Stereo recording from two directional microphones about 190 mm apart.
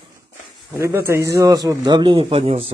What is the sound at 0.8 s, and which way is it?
Speech, 15° right (ahead or behind).